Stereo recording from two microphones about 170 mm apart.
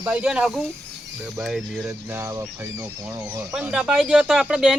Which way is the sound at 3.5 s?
5° right (ahead or behind).